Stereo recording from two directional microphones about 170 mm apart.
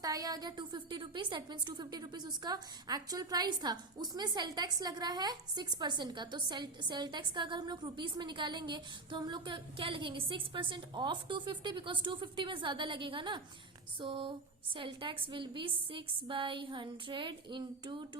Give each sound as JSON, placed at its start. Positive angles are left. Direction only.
{"t": 0.0, "sound": "a woman's voice", "side_deg": -20}